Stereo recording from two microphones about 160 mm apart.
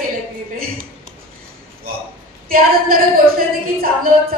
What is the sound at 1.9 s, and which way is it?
A woman's voice, 65° right (ahead or behind).